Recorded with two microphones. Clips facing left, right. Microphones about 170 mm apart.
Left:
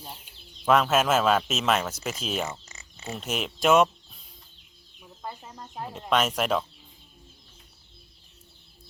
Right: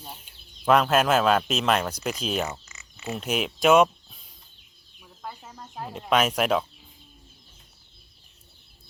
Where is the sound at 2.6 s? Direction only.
35° left (ahead or behind).